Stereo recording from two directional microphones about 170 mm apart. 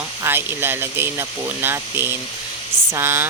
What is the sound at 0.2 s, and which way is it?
Speech, 15° right (ahead or behind).